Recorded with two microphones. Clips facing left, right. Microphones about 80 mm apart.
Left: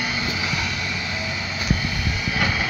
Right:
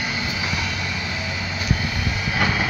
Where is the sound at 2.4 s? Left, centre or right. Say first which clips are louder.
Right 2 dB; right.